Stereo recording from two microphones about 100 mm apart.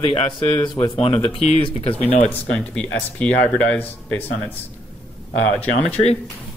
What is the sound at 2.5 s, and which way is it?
Speech, 10° left (ahead or behind).